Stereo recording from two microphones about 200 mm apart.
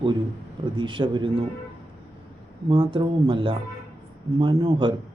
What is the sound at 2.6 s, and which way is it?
Speech, 25° right (ahead or behind).